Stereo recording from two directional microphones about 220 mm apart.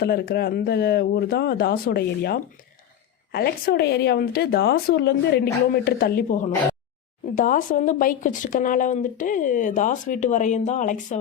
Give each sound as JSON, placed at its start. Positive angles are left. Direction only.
{"t": 0.0, "sound": "a woman's voice", "side_deg": 45}